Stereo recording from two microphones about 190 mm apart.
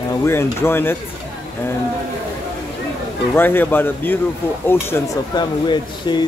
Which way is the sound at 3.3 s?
10° left (ahead or behind).